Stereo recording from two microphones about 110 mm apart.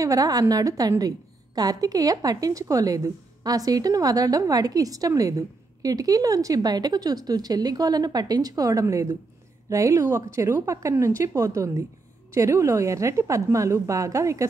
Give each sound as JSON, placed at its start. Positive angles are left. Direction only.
{"t": 0.0, "sound": "a woman's voice", "side_deg": -35}